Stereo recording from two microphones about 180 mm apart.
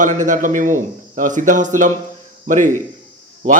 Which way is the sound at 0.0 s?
45° right (ahead or behind).